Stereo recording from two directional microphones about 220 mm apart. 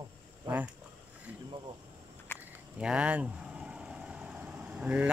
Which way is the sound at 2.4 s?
5° right (ahead or behind).